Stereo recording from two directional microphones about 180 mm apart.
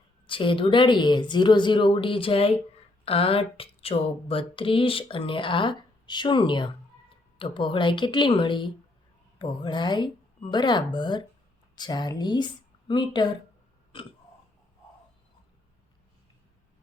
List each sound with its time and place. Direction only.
0.3 s speech: 30° left (ahead or behind)